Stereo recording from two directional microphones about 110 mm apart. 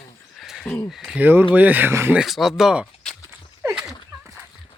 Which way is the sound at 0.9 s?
Centre (ahead or behind).